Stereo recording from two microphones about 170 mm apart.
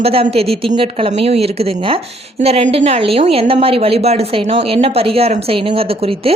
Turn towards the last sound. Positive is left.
turn(degrees=-35)  # may be behind; listen again after turning